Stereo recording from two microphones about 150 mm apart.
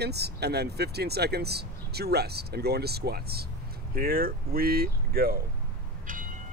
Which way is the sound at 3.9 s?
75° right (ahead or behind).